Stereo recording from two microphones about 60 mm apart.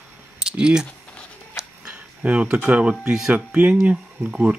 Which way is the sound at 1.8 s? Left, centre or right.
Centre.